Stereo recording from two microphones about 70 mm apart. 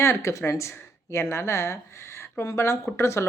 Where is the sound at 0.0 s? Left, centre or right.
Left.